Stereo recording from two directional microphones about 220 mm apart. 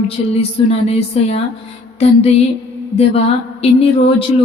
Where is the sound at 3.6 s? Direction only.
25° left (ahead or behind).